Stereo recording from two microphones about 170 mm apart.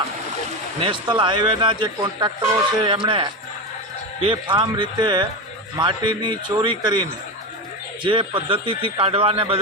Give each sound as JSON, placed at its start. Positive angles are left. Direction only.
{"t": 0.8, "sound": "a man's voice", "side_deg": -30}